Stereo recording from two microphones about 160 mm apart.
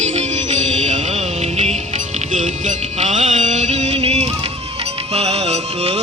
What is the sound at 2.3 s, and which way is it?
Music, 50° right (ahead or behind).